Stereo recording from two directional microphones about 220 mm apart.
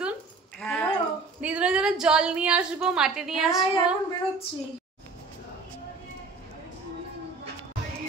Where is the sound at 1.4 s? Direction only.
5° right (ahead or behind).